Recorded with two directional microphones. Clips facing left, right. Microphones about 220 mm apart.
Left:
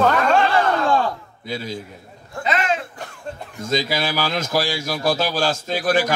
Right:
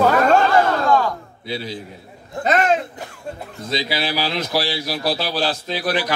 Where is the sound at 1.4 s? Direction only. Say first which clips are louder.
Even; 45° left (ahead or behind).